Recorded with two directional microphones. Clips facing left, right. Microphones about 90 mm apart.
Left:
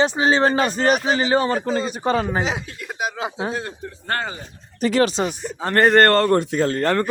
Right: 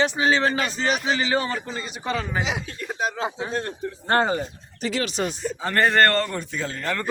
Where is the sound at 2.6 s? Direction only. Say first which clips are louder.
Even; 10° left (ahead or behind).